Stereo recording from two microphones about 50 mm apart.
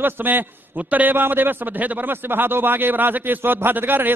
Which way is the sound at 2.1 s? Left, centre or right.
Right.